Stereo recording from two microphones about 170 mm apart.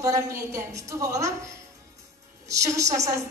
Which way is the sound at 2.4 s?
20° right (ahead or behind).